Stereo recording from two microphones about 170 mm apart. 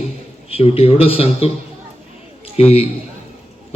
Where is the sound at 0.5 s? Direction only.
35° left (ahead or behind).